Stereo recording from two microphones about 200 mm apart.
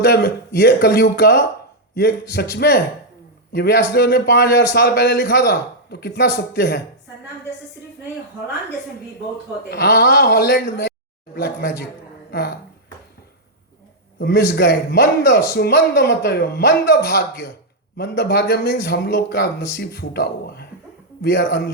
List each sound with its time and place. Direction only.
0.0 s a man's voice: 55° left (ahead or behind)
9.6 s a man's voice: 50° left (ahead or behind)
12.3 s a man's voice: 50° left (ahead or behind)
14.2 s a man's voice: 55° left (ahead or behind)